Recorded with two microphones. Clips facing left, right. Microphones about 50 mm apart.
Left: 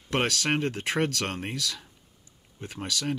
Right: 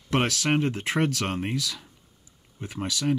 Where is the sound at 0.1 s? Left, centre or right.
Centre.